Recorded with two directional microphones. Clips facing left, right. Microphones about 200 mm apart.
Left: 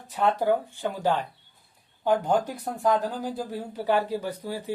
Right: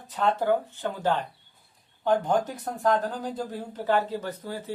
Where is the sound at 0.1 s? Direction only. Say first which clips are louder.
Left 1 dB; 10° left (ahead or behind).